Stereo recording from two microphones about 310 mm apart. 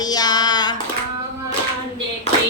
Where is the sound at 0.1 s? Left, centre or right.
Centre.